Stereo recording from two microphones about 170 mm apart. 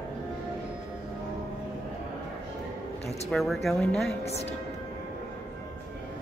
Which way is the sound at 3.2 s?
Centre (ahead or behind).